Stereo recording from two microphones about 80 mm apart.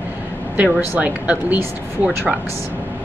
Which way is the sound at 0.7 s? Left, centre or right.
Centre.